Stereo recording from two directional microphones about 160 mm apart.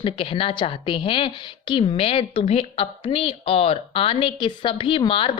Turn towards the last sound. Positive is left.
turn(degrees=35)  # may be behind; listen again after turning